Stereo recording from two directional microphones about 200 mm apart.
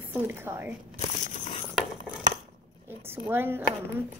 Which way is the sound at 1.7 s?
5° right (ahead or behind).